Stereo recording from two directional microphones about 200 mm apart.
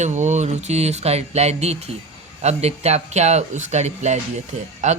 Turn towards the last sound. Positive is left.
turn(degrees=-35)  # may be behind; listen again after turning